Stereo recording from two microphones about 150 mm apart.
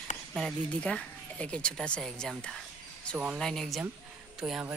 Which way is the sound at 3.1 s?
10° right (ahead or behind).